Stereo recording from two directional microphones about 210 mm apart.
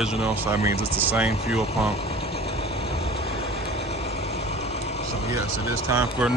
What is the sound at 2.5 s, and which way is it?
Vehicle, 30° left (ahead or behind).